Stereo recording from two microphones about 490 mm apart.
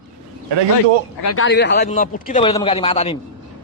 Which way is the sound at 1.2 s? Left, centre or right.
Left.